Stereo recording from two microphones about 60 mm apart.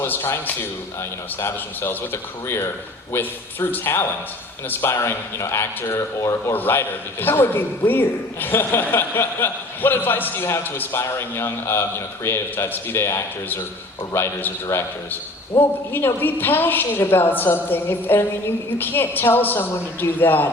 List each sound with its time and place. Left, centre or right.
0.0 s a woman's voice: left
3.1 s a woman's voice: left
6.5 s a woman's voice: left
15.5 s a man's voice: left
15.9 s a woman's voice: left